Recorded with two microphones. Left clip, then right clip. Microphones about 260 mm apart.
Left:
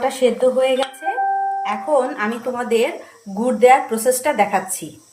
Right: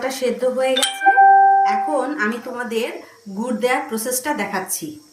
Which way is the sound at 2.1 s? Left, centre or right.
Centre.